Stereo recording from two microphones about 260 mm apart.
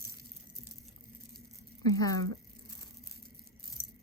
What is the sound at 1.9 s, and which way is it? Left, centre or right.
Speech, centre.